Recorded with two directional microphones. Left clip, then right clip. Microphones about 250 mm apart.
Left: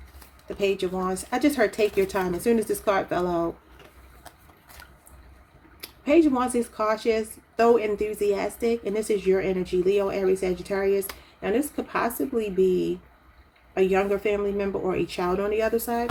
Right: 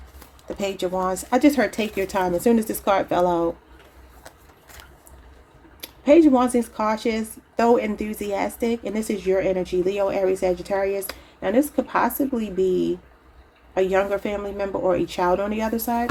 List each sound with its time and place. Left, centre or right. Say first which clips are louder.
0.4 s speech: left 1 dB; right
5.8 s speech: right 5 dB; right